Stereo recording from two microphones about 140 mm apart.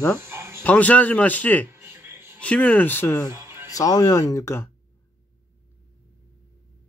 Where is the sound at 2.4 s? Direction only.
10° left (ahead or behind).